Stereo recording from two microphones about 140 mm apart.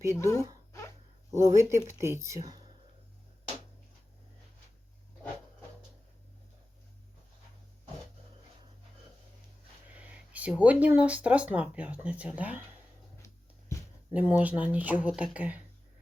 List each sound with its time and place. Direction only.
0.0 s speech: 20° right (ahead or behind)
0.7 s dog: 20° left (ahead or behind)
1.3 s speech: 20° right (ahead or behind)
9.9 s speech: 10° right (ahead or behind)
13.2 s music: 20° left (ahead or behind)
14.1 s speech: 10° right (ahead or behind)